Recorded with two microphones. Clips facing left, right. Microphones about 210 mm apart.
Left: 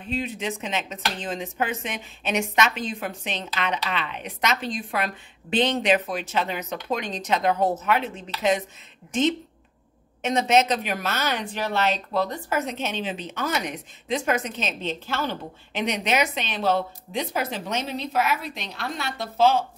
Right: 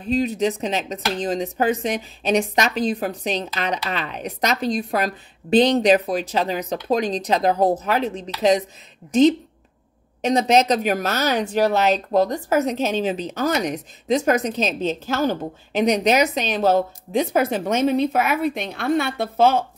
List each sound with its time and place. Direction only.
0.0 s speech: 40° right (ahead or behind); by 19.6 s 55° right (ahead or behind)